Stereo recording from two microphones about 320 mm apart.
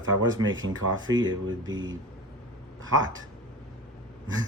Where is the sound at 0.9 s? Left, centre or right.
Centre.